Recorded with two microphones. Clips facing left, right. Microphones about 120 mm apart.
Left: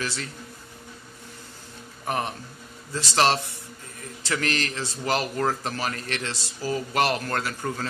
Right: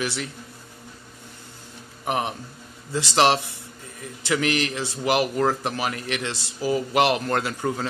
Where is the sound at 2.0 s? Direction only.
15° right (ahead or behind).